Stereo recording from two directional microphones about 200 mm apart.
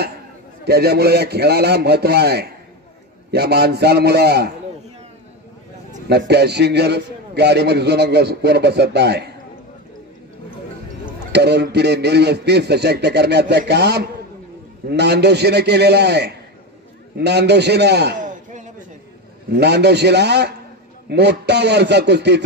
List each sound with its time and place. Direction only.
0.7 s a man's voice: 55° right (ahead or behind)
6.0 s a man's voice: 55° right (ahead or behind)
11.3 s a man's voice: 55° right (ahead or behind)
18.2 s a sound: 40° right (ahead or behind)
19.5 s a man's voice: 55° right (ahead or behind)